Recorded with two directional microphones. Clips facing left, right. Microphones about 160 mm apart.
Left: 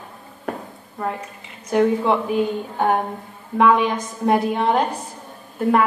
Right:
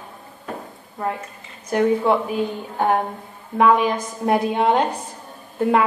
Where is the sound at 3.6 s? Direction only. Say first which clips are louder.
Even; 5° right (ahead or behind).